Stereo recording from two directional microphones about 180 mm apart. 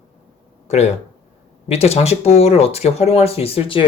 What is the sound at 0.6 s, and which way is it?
Speech, 35° left (ahead or behind).